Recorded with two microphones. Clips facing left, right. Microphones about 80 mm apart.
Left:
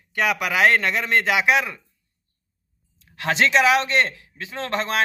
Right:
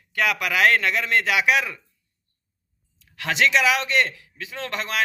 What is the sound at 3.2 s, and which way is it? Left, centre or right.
A man's voice, left.